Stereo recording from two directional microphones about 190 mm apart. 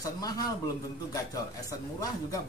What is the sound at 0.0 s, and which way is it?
Speech, 20° left (ahead or behind).